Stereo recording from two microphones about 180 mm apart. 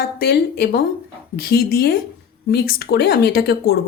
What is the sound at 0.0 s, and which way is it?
Speech, 60° left (ahead or behind).